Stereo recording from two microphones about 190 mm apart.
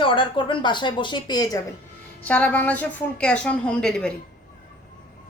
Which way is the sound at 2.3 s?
10° left (ahead or behind).